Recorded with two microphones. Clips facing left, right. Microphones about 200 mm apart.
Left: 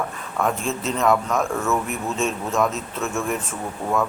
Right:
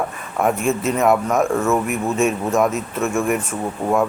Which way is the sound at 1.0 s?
15° right (ahead or behind).